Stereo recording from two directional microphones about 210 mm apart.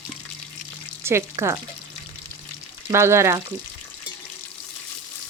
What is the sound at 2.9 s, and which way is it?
Frying, 10° right (ahead or behind).